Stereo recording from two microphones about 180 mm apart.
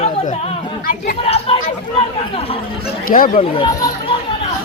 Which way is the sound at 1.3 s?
30° left (ahead or behind).